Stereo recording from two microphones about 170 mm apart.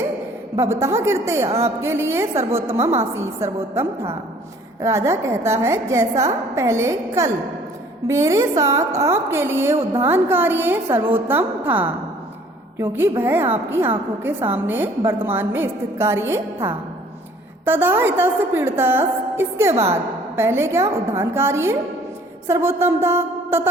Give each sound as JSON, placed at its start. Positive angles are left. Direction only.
{"t": 0.5, "sound": "a woman's voice", "side_deg": -15}
{"t": 17.7, "sound": "a woman's voice", "side_deg": -10}